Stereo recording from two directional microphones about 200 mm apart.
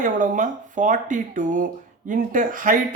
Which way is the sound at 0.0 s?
40° right (ahead or behind).